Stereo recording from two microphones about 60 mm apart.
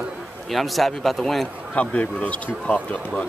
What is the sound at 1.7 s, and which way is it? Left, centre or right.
Speech, left.